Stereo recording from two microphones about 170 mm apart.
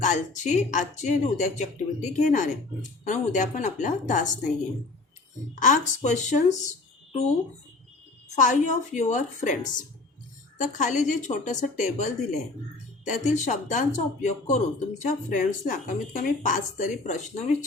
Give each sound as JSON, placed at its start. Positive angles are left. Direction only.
{"t": 0.0, "sound": "speech", "side_deg": 45}
{"t": 5.5, "sound": "speech", "side_deg": 45}
{"t": 8.4, "sound": "speech", "side_deg": 45}
{"t": 10.6, "sound": "speech", "side_deg": 45}